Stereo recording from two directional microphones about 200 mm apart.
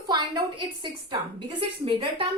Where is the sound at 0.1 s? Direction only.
20° right (ahead or behind).